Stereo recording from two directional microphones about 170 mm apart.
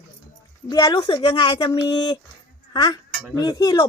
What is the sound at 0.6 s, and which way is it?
Speech, 25° left (ahead or behind).